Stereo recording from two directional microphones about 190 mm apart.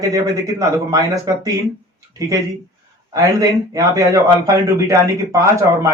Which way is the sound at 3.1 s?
20° right (ahead or behind).